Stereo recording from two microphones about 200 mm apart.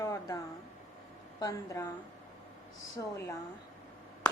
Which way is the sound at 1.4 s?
15° left (ahead or behind).